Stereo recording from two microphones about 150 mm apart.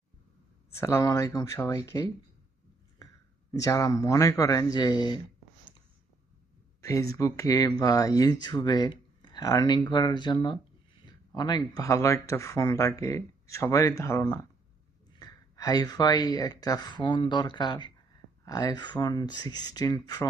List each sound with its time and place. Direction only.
0.7 s speech: 20° left (ahead or behind)
3.5 s speech: 20° left (ahead or behind)
6.8 s speech: 20° left (ahead or behind)